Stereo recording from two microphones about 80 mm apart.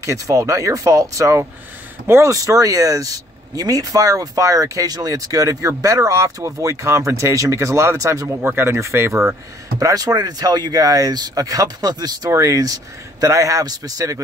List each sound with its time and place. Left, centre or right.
0.0 s speech: right
8.4 s speech: right
9.8 s speech: right
12.3 s speech: right